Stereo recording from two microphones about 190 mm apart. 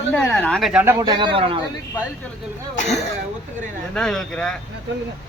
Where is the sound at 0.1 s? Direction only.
10° left (ahead or behind).